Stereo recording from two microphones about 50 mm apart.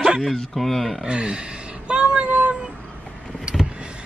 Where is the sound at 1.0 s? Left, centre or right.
Centre.